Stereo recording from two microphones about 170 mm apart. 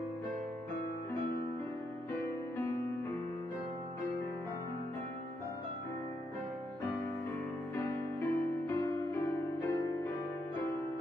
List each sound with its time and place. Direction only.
2.2 s music: 15° left (ahead or behind)
7.7 s music: 15° left (ahead or behind)